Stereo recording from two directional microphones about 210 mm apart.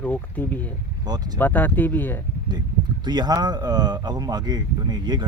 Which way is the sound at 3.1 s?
20° right (ahead or behind).